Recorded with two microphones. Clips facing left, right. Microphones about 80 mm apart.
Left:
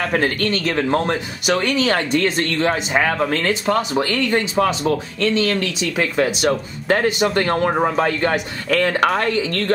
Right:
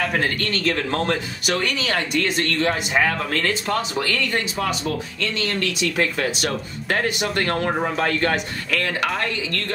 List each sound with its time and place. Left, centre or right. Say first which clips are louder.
0.1 s speech: left 4 dB; left
0.6 s speech: left 2 dB; left
5.6 s speech: left 1 dB; left
8.6 s speech: left 8 dB; left